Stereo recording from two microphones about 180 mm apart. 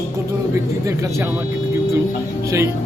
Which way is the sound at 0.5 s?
15° right (ahead or behind).